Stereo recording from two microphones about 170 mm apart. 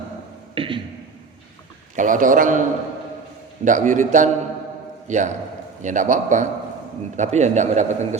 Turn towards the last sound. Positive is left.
turn(degrees=-45)  # may be behind; listen again after turning